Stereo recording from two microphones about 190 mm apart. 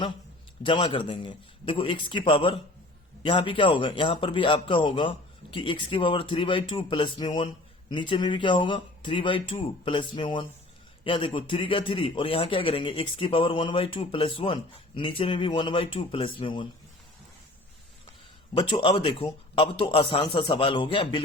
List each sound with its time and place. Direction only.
0.6 s a man's voice: 25° left (ahead or behind)
18.5 s a man's voice: 25° left (ahead or behind)